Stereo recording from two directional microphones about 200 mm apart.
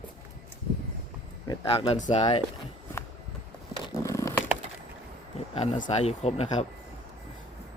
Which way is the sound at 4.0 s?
15° left (ahead or behind).